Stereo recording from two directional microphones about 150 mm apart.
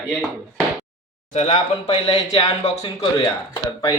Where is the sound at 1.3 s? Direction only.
45° left (ahead or behind).